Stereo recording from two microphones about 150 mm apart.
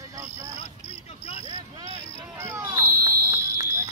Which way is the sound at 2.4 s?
15° right (ahead or behind).